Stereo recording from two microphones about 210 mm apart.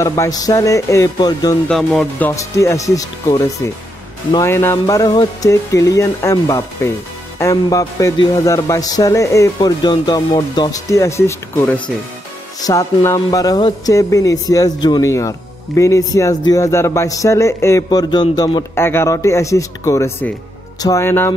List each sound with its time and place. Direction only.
0.0 s speech: 15° left (ahead or behind)
1.7 s speech: centre (ahead or behind)